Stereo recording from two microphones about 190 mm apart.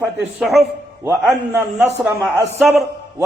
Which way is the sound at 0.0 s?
5° right (ahead or behind).